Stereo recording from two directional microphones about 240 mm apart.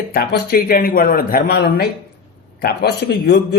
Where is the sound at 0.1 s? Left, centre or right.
Left.